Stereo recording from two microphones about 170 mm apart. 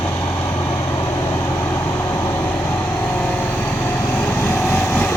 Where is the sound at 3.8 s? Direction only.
10° left (ahead or behind).